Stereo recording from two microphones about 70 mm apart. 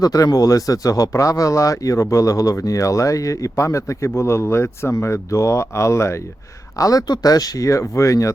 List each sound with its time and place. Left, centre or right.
0.0 s speech: left
6.7 s speech: left